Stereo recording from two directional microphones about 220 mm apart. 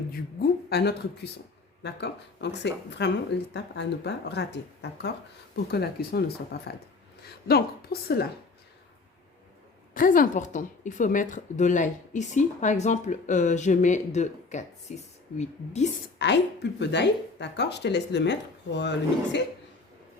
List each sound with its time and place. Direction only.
0.1 s speech: 45° left (ahead or behind)
9.9 s a woman's voice: 40° left (ahead or behind)
16.1 s speech: 50° left (ahead or behind)